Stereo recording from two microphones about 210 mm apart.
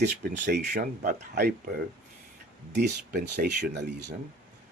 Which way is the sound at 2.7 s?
45° right (ahead or behind).